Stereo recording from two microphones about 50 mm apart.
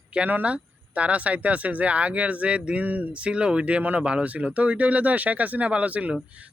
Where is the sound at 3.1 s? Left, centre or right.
Right.